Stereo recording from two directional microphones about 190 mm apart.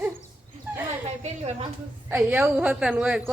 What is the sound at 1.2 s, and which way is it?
Speech, 35° right (ahead or behind).